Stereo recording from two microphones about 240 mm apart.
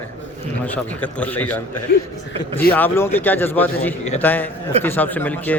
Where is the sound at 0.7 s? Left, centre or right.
Centre.